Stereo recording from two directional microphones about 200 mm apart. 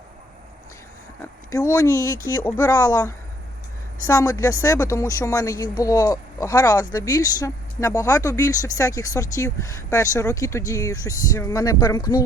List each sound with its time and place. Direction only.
1.8 s speech: 15° left (ahead or behind)